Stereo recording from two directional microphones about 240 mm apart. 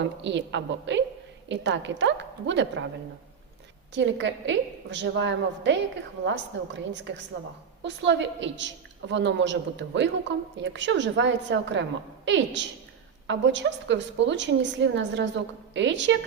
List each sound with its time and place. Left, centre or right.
0.0 s a woman's voice: right
3.9 s a woman's voice: right